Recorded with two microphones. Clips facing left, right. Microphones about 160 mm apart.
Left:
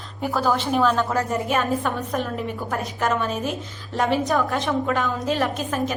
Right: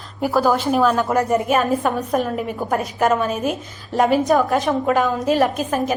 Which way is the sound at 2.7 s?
15° right (ahead or behind).